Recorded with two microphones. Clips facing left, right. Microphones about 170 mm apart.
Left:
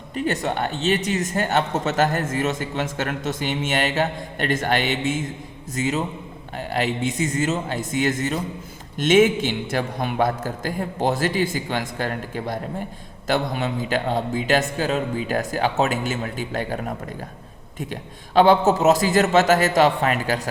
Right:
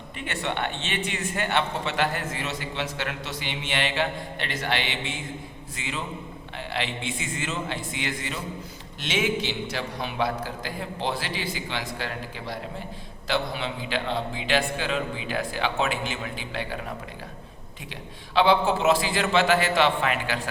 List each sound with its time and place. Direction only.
0.2 s a man's voice: 40° left (ahead or behind)
18.3 s a man's voice: 45° left (ahead or behind)